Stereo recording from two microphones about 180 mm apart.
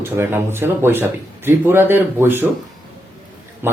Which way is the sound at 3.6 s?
10° right (ahead or behind).